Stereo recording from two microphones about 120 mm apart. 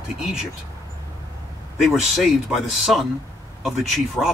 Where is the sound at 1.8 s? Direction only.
Centre (ahead or behind).